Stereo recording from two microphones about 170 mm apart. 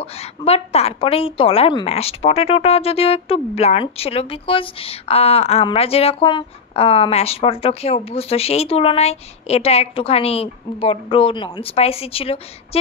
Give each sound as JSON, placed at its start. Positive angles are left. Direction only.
{"t": 0.0, "sound": "a woman's voice", "side_deg": 35}